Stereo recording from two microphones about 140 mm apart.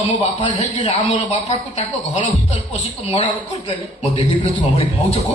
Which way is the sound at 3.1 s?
50° left (ahead or behind).